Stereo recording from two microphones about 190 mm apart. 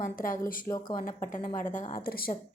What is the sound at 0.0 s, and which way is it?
Speech, 45° left (ahead or behind).